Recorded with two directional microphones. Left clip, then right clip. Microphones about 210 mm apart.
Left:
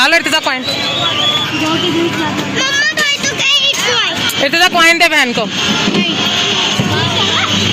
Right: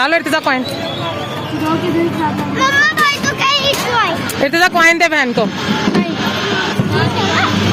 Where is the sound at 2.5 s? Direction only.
50° right (ahead or behind); by 4.1 s 30° right (ahead or behind).